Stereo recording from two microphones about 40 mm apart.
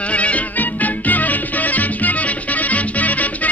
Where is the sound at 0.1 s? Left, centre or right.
Left.